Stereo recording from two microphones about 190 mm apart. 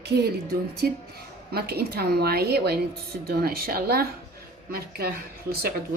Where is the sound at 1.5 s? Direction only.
55° right (ahead or behind).